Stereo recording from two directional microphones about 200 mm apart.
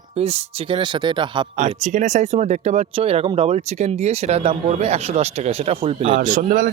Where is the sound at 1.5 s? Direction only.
35° right (ahead or behind).